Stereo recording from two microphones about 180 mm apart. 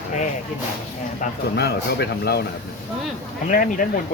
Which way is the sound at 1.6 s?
65° left (ahead or behind).